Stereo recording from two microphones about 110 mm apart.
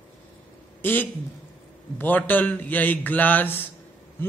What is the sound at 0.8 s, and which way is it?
A man's voice, 15° left (ahead or behind).